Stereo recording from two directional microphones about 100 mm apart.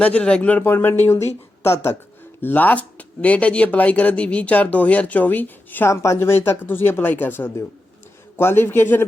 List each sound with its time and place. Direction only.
0.0 s speech: 10° left (ahead or behind)
0.6 s speech: 20° left (ahead or behind)
5.9 s speech: 30° left (ahead or behind)